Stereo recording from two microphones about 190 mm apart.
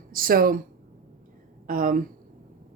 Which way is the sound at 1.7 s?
45° right (ahead or behind).